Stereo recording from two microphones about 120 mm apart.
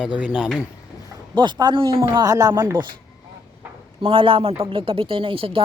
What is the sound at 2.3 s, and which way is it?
Speech, 30° right (ahead or behind).